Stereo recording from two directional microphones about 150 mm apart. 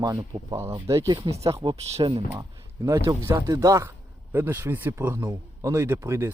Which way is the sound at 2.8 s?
20° right (ahead or behind).